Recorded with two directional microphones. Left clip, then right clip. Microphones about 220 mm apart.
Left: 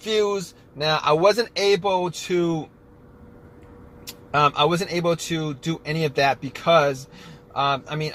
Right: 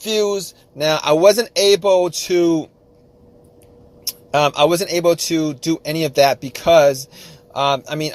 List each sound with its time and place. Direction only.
0.0 s speech: 45° right (ahead or behind)
4.3 s speech: 50° right (ahead or behind)